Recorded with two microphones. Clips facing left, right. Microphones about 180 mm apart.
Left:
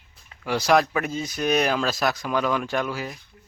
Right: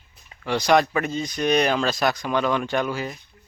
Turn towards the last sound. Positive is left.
turn(degrees=0)  # may be behind; listen again after turning